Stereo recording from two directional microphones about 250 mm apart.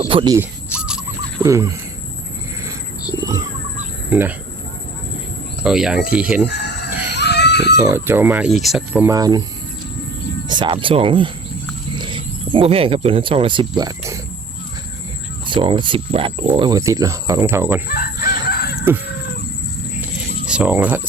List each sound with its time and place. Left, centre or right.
0.1 s speech: centre
0.7 s a sound: centre
3.2 s speech: centre
5.6 s speech: centre
7.1 s screaming: left
7.8 s speech: centre
10.5 s speech: centre
15.4 s speech: centre
17.8 s fowl: left
20.0 s a sound: centre